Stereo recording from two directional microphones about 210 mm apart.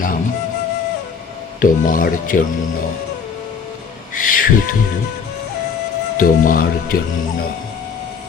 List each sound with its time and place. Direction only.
1.6 s speech: 40° left (ahead or behind)
4.1 s owl: 40° left (ahead or behind)
6.1 s speech: 40° left (ahead or behind)